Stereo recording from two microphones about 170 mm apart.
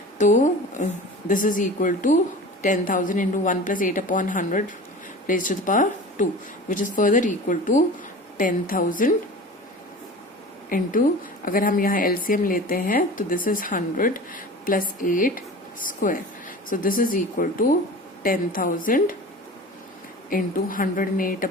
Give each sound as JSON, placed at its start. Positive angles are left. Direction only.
{"t": 0.2, "sound": "speech", "side_deg": 45}
{"t": 10.7, "sound": "speech", "side_deg": 50}
{"t": 20.3, "sound": "a woman's voice", "side_deg": 55}